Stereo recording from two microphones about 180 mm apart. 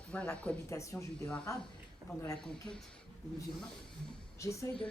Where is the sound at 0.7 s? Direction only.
15° left (ahead or behind).